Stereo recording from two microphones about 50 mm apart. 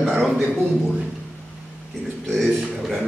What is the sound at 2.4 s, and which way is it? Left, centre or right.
Speech, centre.